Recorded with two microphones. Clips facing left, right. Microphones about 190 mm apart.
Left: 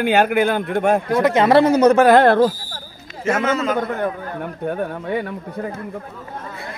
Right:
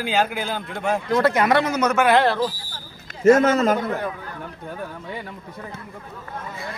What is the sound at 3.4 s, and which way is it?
Speech, 40° right (ahead or behind).